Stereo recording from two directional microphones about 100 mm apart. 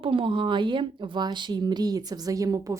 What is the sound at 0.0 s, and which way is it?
A woman's voice, 65° right (ahead or behind).